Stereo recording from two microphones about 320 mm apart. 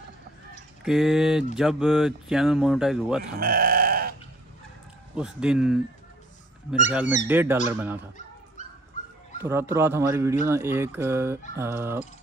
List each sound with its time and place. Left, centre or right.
0.8 s speech: centre
3.3 s speech: right
5.1 s speech: centre
6.9 s speech: centre
9.4 s a man's voice: centre